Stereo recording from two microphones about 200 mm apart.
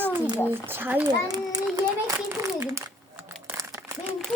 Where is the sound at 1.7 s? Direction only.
15° right (ahead or behind).